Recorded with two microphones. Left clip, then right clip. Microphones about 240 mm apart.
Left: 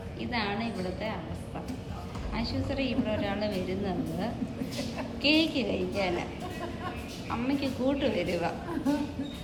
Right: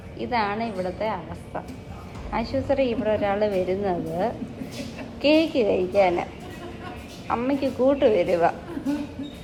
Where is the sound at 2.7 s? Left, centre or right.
Right.